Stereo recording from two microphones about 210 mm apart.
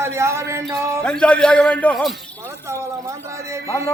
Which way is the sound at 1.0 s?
5° left (ahead or behind).